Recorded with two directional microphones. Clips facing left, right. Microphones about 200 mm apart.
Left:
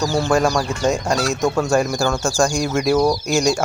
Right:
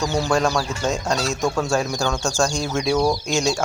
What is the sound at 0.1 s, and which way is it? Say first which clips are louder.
Speech: left 2 dB; centre (ahead or behind).